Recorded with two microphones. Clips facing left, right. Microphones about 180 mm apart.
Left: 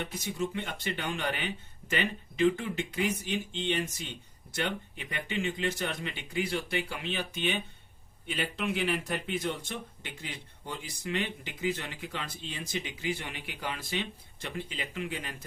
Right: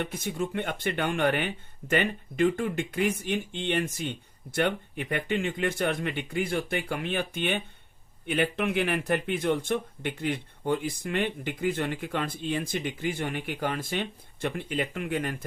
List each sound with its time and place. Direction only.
0.0 s speech: 55° right (ahead or behind)